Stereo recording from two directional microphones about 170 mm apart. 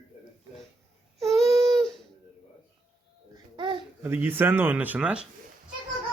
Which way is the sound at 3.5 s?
25° right (ahead or behind).